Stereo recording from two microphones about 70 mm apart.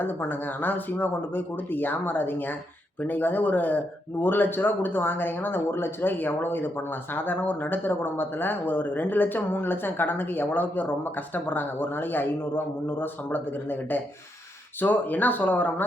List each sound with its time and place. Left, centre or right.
0.0 s speech: left